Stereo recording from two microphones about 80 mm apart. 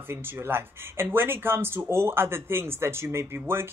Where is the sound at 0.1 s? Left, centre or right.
Right.